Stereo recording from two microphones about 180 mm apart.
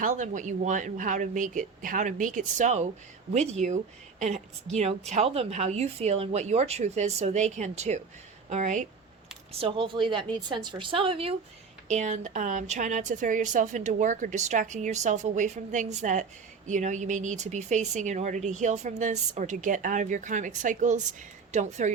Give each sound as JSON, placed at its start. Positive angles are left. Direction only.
{"t": 0.0, "sound": "a woman's voice", "side_deg": -45}
{"t": 9.5, "sound": "a woman's voice", "side_deg": -30}
{"t": 11.9, "sound": "speech", "side_deg": -40}